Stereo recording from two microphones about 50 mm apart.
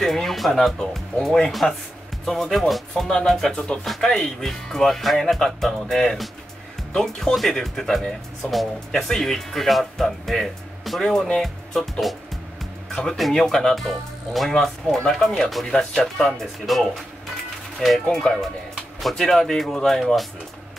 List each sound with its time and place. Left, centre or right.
0.0 s speech: centre
4.4 s speech: centre
7.3 s speech: centre
18.0 s speech: centre